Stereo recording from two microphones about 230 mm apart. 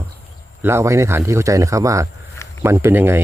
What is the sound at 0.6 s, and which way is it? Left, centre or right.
Speech, centre.